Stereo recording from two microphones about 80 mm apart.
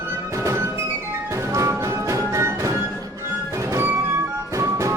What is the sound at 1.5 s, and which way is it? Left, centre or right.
Music, right.